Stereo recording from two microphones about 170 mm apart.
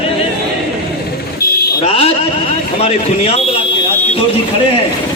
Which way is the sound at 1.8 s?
35° left (ahead or behind).